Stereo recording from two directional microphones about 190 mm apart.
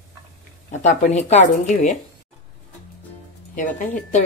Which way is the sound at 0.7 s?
40° left (ahead or behind).